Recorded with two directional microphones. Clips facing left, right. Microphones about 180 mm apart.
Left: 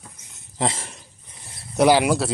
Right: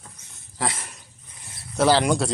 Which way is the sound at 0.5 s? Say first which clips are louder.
Left 4 dB; 25° left (ahead or behind).